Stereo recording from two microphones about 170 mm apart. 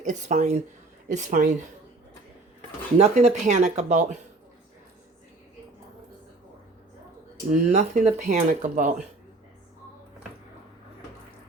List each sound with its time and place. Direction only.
0.0 s speech: 45° right (ahead or behind)
3.0 s speech: 45° right (ahead or behind)
7.5 s speech: 50° right (ahead or behind)